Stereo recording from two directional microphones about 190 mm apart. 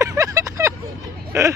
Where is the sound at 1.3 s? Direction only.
15° right (ahead or behind).